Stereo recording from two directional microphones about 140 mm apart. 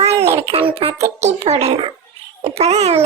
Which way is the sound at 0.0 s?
50° right (ahead or behind).